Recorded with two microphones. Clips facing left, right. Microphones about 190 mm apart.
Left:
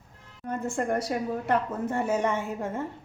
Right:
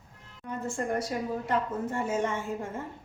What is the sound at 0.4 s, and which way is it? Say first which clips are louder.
Speech: left 3 dB; 50° left (ahead or behind).